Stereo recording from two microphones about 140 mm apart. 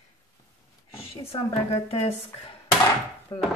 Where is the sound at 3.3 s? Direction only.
30° left (ahead or behind).